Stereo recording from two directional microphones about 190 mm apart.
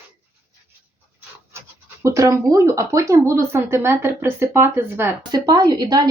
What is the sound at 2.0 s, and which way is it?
A woman's voice, 15° right (ahead or behind).